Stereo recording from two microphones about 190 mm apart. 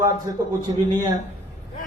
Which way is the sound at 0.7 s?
25° right (ahead or behind).